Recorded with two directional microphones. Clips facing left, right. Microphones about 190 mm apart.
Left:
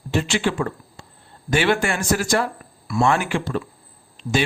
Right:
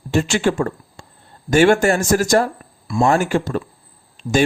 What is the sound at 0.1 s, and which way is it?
Speech, 45° right (ahead or behind).